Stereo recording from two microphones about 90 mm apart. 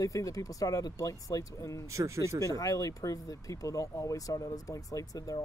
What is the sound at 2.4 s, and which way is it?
Speech, 40° left (ahead or behind).